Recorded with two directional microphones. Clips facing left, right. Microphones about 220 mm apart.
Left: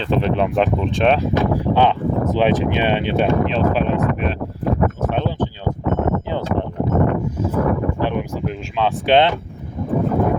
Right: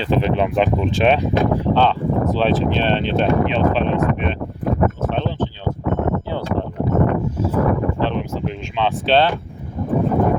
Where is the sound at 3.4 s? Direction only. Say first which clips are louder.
Right 1 dB; centre (ahead or behind).